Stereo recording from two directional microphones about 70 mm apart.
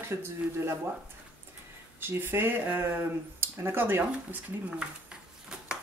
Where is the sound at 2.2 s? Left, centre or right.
Right.